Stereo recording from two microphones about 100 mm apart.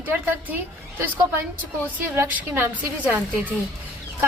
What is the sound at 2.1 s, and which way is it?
A woman's voice, 20° right (ahead or behind).